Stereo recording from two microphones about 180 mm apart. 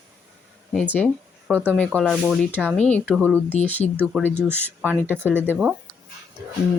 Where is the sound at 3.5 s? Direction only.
40° left (ahead or behind).